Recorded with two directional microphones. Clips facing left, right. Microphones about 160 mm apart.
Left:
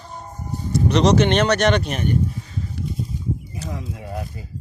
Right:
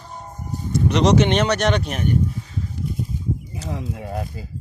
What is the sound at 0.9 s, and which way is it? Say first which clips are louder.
Speech: even; 15° right (ahead or behind).